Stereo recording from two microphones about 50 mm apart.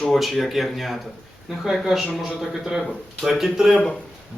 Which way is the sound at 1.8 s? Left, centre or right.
Centre.